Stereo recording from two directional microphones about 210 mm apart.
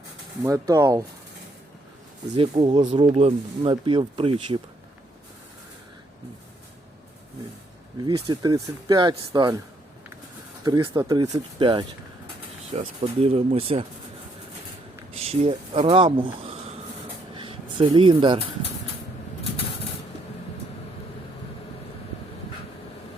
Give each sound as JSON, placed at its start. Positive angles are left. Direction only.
{"t": 0.4, "sound": "speech", "side_deg": -15}
{"t": 2.3, "sound": "speech", "side_deg": -30}
{"t": 7.9, "sound": "speech", "side_deg": -20}
{"t": 10.6, "sound": "speech", "side_deg": -20}
{"t": 13.0, "sound": "speech", "side_deg": -30}
{"t": 15.1, "sound": "speech", "side_deg": -30}
{"t": 17.3, "sound": "a sound", "side_deg": -25}